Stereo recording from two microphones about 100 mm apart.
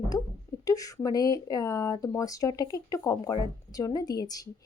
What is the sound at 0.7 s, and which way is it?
A woman's voice, 35° left (ahead or behind).